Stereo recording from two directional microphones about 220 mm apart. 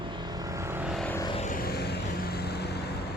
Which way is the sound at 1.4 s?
40° left (ahead or behind).